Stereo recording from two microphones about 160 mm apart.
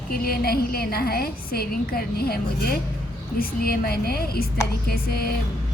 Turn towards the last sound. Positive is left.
turn(degrees=75)  # may be behind; listen again after turning